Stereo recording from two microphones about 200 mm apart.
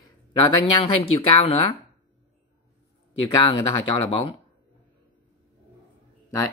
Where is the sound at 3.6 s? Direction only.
25° left (ahead or behind).